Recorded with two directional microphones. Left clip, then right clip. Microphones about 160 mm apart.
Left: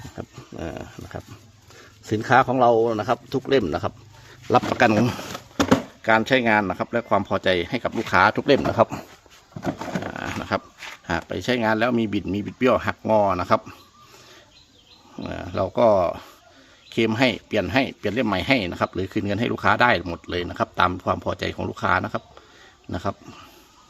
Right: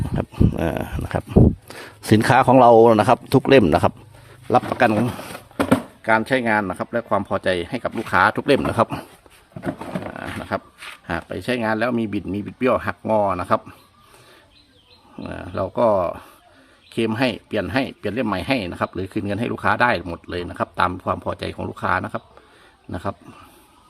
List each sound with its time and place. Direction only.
0.2 s a sound: 55° right (ahead or behind)
1.8 s speech: 75° right (ahead or behind); by 3.9 s 50° right (ahead or behind)
4.4 s speech: centre (ahead or behind)
10.5 s speech: 10° left (ahead or behind)
15.1 s speech: centre (ahead or behind)